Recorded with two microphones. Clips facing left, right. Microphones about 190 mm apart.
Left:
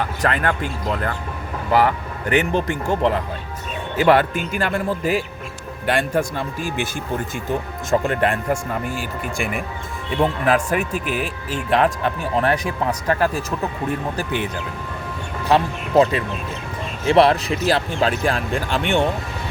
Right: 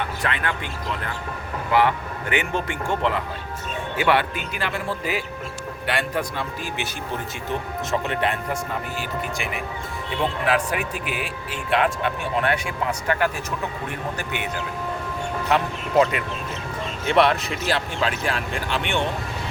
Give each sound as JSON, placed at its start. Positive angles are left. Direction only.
{"t": 0.0, "sound": "speech", "side_deg": 40}
{"t": 7.9, "sound": "speech", "side_deg": 45}
{"t": 15.4, "sound": "speech", "side_deg": 30}